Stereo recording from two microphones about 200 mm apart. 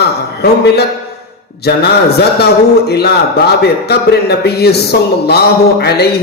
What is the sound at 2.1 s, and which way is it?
A man's voice, 55° left (ahead or behind).